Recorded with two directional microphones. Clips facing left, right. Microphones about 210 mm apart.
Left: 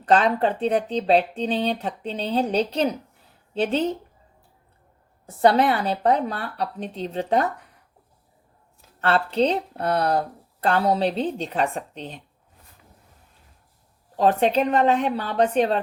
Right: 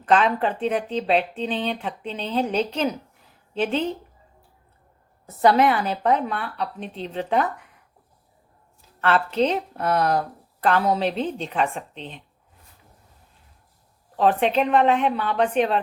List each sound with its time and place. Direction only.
0.0 s speech: 35° left (ahead or behind)
5.2 s speech: 30° left (ahead or behind)
9.0 s speech: 35° left (ahead or behind)
14.2 s speech: 40° left (ahead or behind)